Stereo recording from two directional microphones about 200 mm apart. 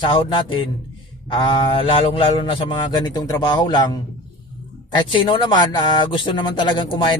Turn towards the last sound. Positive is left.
turn(degrees=25)  # may be behind; listen again after turning